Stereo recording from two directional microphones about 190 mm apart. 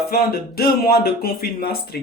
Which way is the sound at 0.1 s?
55° left (ahead or behind).